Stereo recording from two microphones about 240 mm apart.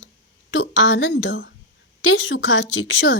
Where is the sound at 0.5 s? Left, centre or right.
Left.